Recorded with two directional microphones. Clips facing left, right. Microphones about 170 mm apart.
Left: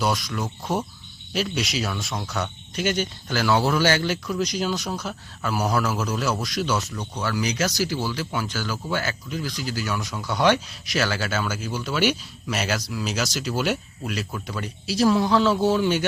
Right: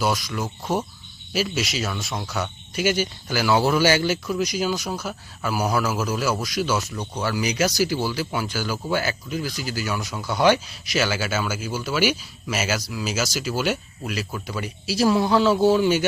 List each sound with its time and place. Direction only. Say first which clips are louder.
0.0 s speech: right 1 dB; centre (ahead or behind)